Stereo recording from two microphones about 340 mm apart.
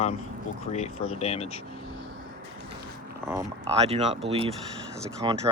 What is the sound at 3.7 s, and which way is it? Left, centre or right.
Speech, centre.